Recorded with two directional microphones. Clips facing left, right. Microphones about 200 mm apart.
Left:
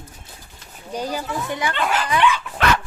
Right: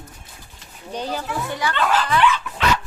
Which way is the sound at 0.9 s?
10° left (ahead or behind).